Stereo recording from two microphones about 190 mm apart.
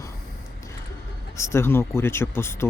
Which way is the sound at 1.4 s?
15° left (ahead or behind).